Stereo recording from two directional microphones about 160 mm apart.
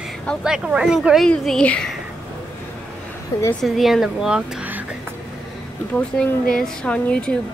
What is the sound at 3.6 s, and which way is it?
Speech, centre (ahead or behind).